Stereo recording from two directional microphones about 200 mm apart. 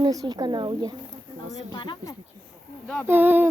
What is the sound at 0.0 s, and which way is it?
Speech, 20° right (ahead or behind).